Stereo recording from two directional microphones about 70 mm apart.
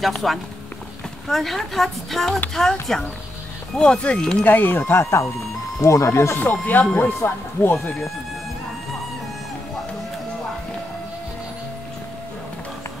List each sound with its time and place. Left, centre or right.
0.0 s speech: centre
4.5 s speech: left
5.8 s speech: left
6.3 s speech: left